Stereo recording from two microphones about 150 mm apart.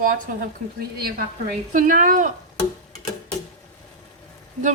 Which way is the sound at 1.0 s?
90° right.